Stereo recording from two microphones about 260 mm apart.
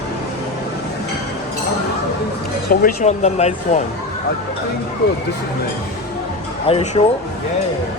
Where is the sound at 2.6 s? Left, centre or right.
Left.